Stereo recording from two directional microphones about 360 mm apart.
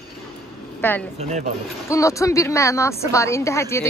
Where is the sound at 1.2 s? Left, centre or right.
Centre.